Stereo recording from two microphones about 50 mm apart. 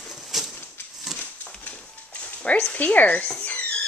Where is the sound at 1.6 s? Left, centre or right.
Left.